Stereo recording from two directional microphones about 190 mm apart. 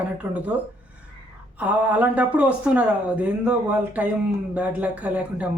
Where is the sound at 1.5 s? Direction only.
10° right (ahead or behind).